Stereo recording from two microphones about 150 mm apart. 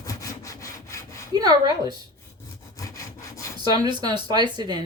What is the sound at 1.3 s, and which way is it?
Speech, 25° right (ahead or behind).